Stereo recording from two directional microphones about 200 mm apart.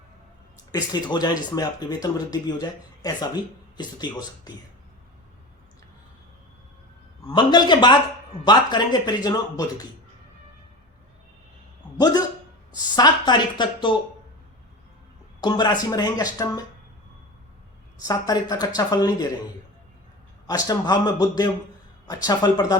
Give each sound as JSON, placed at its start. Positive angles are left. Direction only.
{"t": 0.7, "sound": "speech", "side_deg": 20}
{"t": 7.3, "sound": "speech", "side_deg": 20}
{"t": 11.9, "sound": "speech", "side_deg": 20}
{"t": 15.4, "sound": "speech", "side_deg": 20}
{"t": 18.1, "sound": "speech", "side_deg": 20}
{"t": 20.5, "sound": "speech", "side_deg": 20}